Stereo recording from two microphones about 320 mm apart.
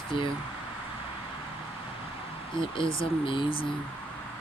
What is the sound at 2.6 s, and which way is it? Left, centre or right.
Speech, centre.